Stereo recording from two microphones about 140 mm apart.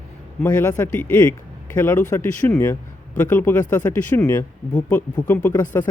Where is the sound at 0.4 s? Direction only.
15° left (ahead or behind).